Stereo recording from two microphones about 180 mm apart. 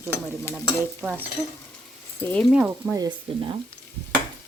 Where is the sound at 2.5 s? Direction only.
5° right (ahead or behind).